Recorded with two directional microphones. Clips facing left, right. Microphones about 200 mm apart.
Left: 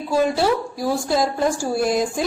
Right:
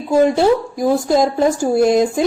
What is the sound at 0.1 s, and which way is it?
A woman's voice, 20° right (ahead or behind).